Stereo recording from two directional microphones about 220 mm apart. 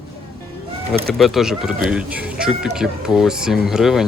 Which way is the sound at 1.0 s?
Centre (ahead or behind).